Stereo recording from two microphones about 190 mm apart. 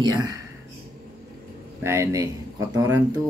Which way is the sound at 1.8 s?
15° right (ahead or behind).